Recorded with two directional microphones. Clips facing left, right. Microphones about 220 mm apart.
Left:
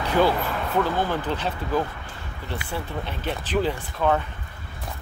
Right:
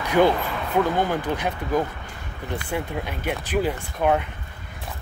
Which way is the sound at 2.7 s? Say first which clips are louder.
Right 3 dB; 10° right (ahead or behind).